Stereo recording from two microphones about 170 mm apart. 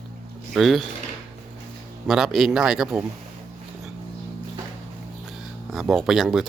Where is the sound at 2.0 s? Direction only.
Centre (ahead or behind).